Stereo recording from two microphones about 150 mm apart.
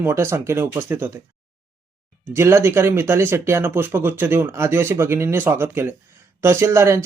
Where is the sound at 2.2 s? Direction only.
15° right (ahead or behind).